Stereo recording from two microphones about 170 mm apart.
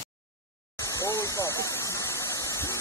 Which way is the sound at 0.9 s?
15° left (ahead or behind).